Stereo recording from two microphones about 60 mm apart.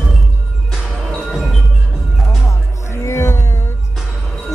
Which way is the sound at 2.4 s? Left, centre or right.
Left.